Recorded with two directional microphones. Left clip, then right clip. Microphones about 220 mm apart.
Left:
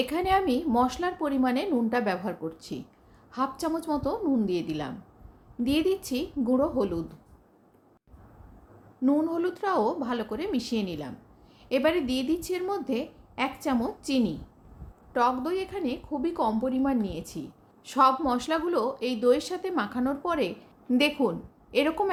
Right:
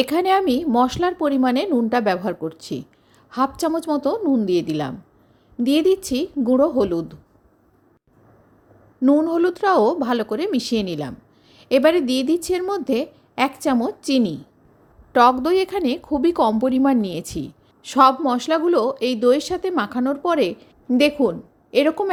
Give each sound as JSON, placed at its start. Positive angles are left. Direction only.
{"t": 0.0, "sound": "a woman's voice", "side_deg": -35}
{"t": 9.0, "sound": "a woman's voice", "side_deg": -30}